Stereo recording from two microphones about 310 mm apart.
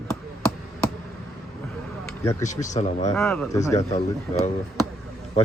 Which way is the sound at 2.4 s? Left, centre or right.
Left.